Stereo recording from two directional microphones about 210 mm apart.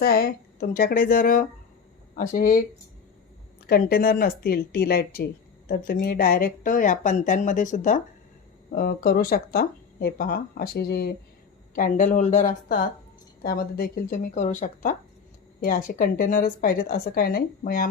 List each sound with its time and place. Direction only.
0.0 s speech: 45° left (ahead or behind)
3.7 s speech: 45° left (ahead or behind)